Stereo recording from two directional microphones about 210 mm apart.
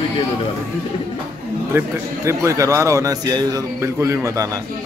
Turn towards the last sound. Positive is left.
turn(degrees=-15)  # may be behind; listen again after turning